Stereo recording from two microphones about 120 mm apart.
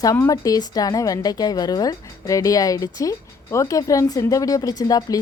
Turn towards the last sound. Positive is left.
turn(degrees=30)  # may be behind; listen again after turning